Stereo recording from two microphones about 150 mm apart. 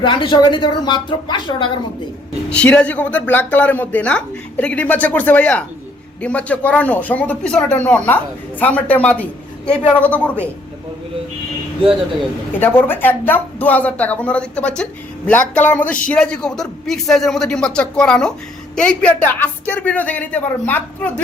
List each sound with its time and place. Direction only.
0.0 s speech: 30° left (ahead or behind)
2.5 s speech: 10° left (ahead or behind)
12.5 s a man's voice: 15° left (ahead or behind)